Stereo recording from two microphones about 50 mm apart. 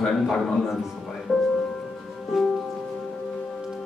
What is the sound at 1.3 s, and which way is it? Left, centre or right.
Music, centre.